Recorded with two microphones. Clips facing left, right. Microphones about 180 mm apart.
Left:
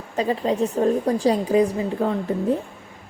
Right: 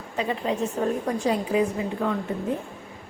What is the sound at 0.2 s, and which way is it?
A woman's voice, 35° left (ahead or behind).